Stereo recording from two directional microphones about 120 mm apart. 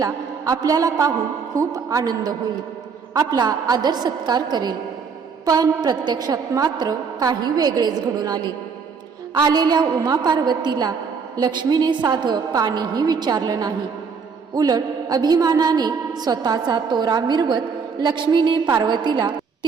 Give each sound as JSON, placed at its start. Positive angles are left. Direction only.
{"t": 0.0, "sound": "a man's voice", "side_deg": -30}